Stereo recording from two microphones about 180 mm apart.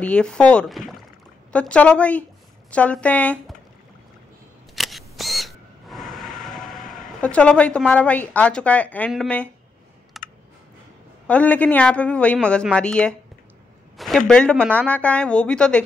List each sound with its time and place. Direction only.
0.0 s a woman's voice: 5° left (ahead or behind)
4.7 s camera: centre (ahead or behind)
9.1 s a woman's voice: 5° left (ahead or behind)
10.1 s computer keyboard: centre (ahead or behind)
11.2 s a woman's voice: 10° left (ahead or behind)